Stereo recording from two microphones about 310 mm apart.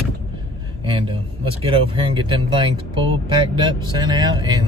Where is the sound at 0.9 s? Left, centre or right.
Centre.